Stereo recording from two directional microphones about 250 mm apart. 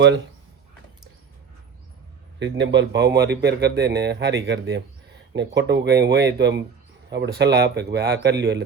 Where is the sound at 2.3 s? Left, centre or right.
Right.